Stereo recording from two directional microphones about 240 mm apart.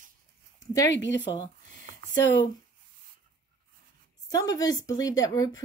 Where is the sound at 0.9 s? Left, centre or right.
Left.